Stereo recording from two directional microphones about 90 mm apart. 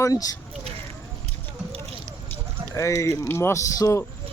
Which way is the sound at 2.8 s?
35° left (ahead or behind).